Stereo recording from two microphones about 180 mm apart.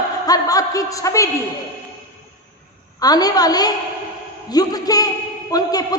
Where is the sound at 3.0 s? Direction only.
20° left (ahead or behind).